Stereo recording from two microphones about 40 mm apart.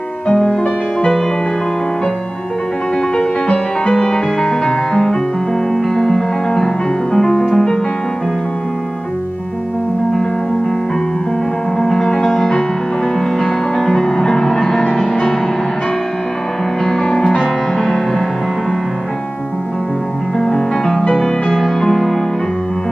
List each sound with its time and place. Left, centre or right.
0.3 s music: left
3.2 s music: centre
11.8 s music: centre
16.8 s music: centre
17.4 s music: centre
20.3 s music: centre